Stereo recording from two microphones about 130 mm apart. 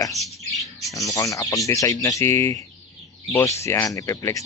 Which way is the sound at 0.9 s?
25° left (ahead or behind).